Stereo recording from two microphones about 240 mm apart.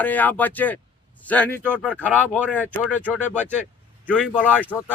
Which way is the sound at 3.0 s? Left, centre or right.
Centre.